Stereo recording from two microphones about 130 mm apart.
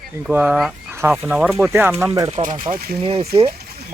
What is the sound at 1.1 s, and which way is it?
Speech, centre (ahead or behind).